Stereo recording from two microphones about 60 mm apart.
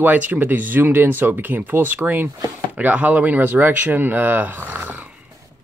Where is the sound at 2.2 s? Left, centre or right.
Right.